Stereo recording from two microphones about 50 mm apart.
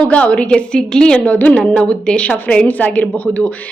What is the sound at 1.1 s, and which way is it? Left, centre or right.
Speech, left.